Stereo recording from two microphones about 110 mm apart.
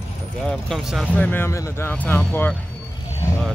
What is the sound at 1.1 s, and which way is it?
Speech, 15° left (ahead or behind).